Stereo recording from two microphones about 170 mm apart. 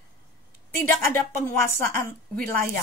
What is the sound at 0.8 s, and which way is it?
A woman's voice, 10° left (ahead or behind).